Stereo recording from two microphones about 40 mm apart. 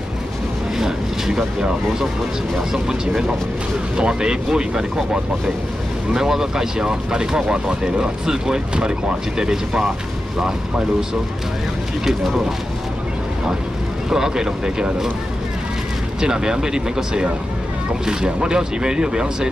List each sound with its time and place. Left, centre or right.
0.7 s vehicle: centre
2.7 s speech: centre
14.1 s speech: centre
16.2 s speech: centre